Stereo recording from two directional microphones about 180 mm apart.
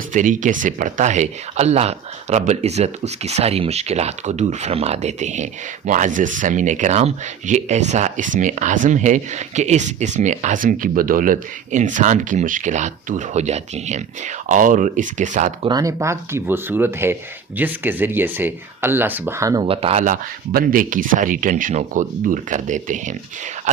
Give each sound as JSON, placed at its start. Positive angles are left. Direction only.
{"t": 0.1, "sound": "speech", "side_deg": -45}
{"t": 15.6, "sound": "speech", "side_deg": -20}
{"t": 19.6, "sound": "speech", "side_deg": -30}
{"t": 20.5, "sound": "speech", "side_deg": -55}